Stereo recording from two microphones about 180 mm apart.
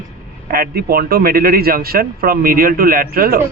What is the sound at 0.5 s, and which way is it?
A man's voice, 55° right (ahead or behind).